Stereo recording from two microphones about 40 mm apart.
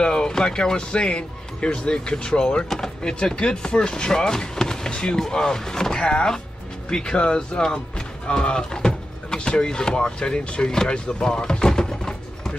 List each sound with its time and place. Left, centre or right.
0.0 s speech: centre